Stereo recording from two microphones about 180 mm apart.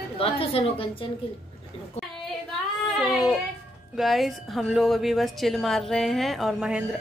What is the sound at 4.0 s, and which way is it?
A woman's voice, centre (ahead or behind).